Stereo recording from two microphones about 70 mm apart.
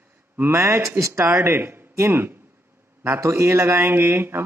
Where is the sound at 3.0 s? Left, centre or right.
Right.